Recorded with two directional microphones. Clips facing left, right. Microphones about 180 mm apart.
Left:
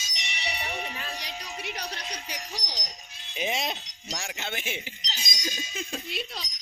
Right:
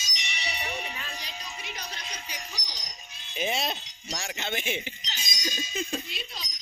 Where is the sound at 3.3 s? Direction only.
15° left (ahead or behind).